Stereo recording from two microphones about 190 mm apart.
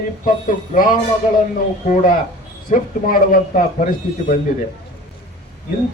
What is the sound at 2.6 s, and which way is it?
A man's voice, 45° left (ahead or behind).